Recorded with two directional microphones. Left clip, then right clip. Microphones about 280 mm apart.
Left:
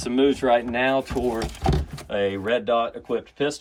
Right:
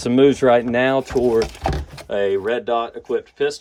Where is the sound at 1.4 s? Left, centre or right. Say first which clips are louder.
Right 5 dB; centre.